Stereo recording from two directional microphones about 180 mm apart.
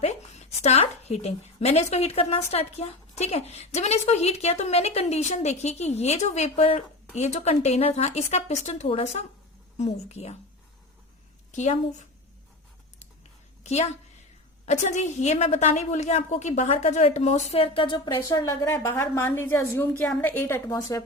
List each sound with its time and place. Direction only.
0.0 s a woman's voice: 35° left (ahead or behind)
11.5 s a woman's voice: 40° left (ahead or behind)
14.7 s a woman's voice: 40° left (ahead or behind); by 21.0 s 15° left (ahead or behind)